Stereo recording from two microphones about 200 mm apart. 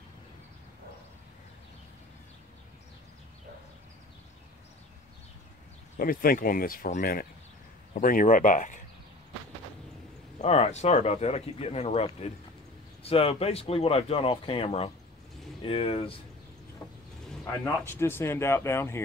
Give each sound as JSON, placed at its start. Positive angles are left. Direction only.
{"t": 5.9, "sound": "speech", "side_deg": 45}
{"t": 10.4, "sound": "speech", "side_deg": 30}
{"t": 17.5, "sound": "speech", "side_deg": 10}